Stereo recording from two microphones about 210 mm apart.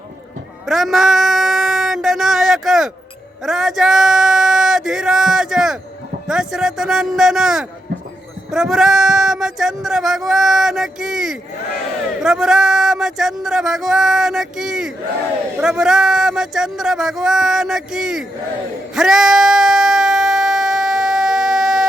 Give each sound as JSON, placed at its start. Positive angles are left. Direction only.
{"t": 0.7, "sound": "a sound", "side_deg": 0}
{"t": 6.2, "sound": "speech", "side_deg": -5}
{"t": 18.9, "sound": "sheep", "side_deg": 0}